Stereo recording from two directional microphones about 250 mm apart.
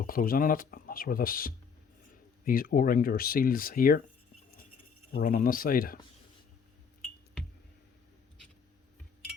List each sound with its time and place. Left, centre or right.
0.0 s speech: left
5.1 s speech: left